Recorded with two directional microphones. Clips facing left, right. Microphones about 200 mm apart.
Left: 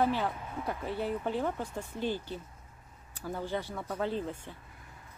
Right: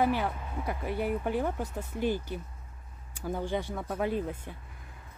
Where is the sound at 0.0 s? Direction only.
10° right (ahead or behind).